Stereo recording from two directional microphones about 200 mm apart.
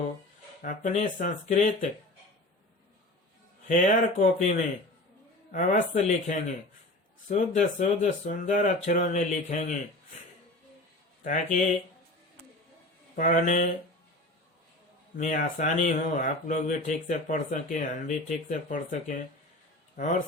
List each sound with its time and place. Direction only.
0.6 s speech: 40° left (ahead or behind)
3.7 s speech: 40° left (ahead or behind)
11.2 s speech: 40° left (ahead or behind)
13.1 s speech: 40° left (ahead or behind)
15.2 s speech: 40° left (ahead or behind)